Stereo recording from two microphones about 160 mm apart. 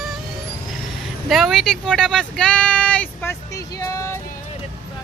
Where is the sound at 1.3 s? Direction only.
Centre (ahead or behind); by 4.2 s 20° left (ahead or behind).